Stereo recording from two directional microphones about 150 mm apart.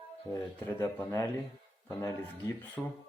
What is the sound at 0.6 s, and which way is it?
Speech, 15° left (ahead or behind).